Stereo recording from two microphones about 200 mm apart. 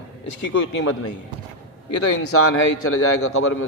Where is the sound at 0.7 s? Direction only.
90° left.